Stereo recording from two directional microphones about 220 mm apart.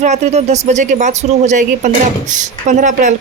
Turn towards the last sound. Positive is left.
turn(degrees=-35)  # may be behind; listen again after turning